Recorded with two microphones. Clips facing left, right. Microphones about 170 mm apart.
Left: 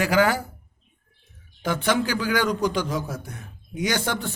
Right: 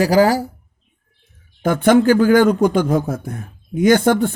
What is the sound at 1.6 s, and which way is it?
A man's voice, 50° right (ahead or behind).